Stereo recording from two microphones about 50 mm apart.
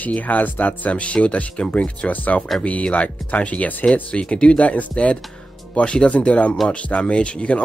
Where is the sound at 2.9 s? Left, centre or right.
Left.